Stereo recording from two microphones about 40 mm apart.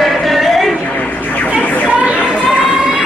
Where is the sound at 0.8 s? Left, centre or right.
Left.